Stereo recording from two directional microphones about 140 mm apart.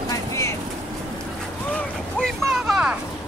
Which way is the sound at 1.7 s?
5° left (ahead or behind).